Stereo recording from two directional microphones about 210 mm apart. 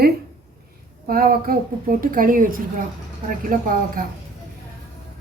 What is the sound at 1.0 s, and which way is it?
A woman's voice, 45° right (ahead or behind).